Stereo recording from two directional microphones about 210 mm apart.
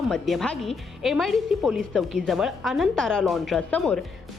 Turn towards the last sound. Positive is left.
turn(degrees=5)  # may be behind; listen again after turning